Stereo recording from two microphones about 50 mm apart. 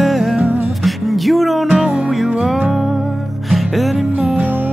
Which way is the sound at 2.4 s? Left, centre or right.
Centre.